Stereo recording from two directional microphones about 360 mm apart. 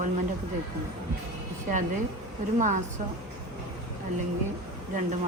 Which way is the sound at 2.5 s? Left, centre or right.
Centre.